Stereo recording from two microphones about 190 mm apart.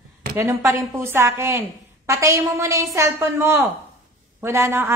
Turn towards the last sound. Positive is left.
turn(degrees=-10)  # may be behind; listen again after turning